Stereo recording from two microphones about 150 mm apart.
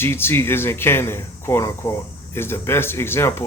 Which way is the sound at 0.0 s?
15° left (ahead or behind).